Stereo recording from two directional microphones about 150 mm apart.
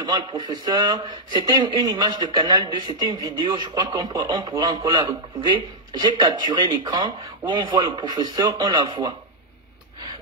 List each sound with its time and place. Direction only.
0.0 s speech: 25° right (ahead or behind)